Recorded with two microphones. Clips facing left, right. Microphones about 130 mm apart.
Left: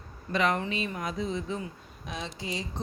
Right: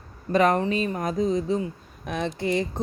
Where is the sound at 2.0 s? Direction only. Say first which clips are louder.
Right 10 dB; 55° right (ahead or behind).